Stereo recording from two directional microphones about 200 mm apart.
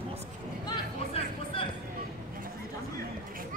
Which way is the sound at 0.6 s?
25° left (ahead or behind).